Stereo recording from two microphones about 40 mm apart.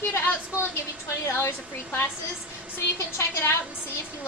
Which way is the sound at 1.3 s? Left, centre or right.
Left.